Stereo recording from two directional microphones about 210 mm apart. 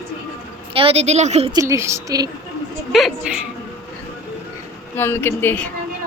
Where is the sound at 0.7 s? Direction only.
30° right (ahead or behind).